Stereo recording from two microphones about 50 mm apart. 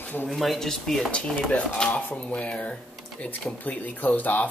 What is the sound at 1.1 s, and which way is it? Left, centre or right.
Speech, left.